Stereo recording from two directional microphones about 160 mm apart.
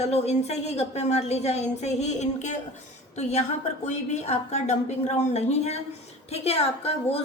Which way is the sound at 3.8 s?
45° left (ahead or behind).